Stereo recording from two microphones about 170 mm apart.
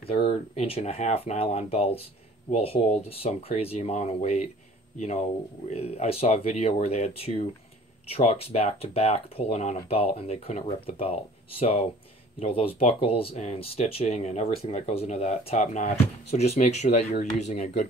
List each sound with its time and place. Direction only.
0.1 s speech: 35° left (ahead or behind)
12.4 s speech: 35° left (ahead or behind)